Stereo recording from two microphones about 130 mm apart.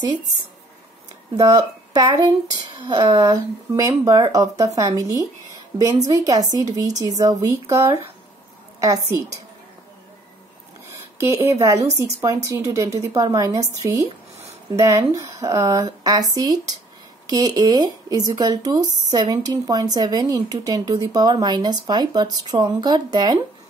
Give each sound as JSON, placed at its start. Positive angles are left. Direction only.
{"t": 1.3, "sound": "speech", "side_deg": -25}
{"t": 2.7, "sound": "a woman's voice", "side_deg": -35}
{"t": 10.9, "sound": "a woman's voice", "side_deg": -20}